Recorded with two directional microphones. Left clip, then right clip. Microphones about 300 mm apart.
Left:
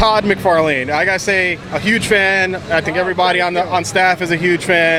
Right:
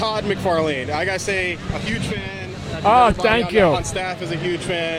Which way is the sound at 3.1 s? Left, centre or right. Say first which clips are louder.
Left 3 dB; left.